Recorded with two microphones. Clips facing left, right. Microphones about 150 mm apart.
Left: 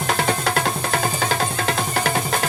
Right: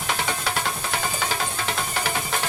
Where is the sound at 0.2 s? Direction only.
50° left (ahead or behind).